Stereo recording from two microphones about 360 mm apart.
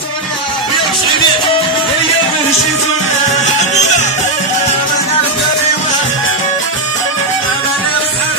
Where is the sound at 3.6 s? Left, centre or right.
Centre.